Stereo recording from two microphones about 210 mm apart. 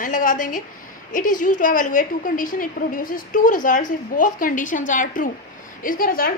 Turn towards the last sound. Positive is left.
turn(degrees=45)  # may be behind; listen again after turning